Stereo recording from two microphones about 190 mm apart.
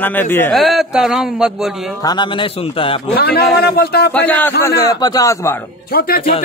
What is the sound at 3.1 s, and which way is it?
A man's voice, 55° left (ahead or behind).